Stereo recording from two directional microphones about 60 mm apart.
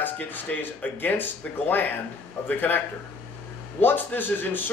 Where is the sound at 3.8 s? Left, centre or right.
Left.